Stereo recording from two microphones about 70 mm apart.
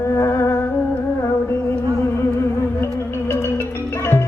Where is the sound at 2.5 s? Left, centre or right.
Left.